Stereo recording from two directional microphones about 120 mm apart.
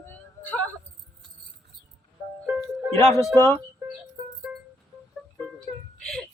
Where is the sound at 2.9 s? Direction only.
30° left (ahead or behind).